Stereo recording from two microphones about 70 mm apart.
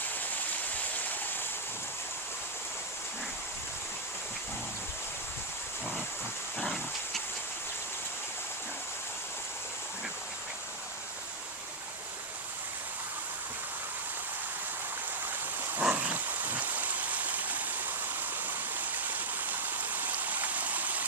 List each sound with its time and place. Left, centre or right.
6.6 s dog: centre
15.8 s stream: right
18.8 s stream: right